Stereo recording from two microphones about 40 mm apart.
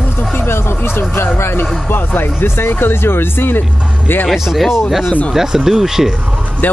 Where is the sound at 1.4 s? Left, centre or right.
Left.